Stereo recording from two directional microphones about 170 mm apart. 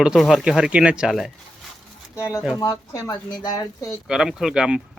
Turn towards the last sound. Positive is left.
turn(degrees=-5)  # may be behind; listen again after turning